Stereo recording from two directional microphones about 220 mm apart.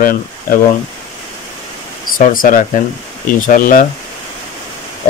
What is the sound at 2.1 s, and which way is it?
Speech, 40° left (ahead or behind).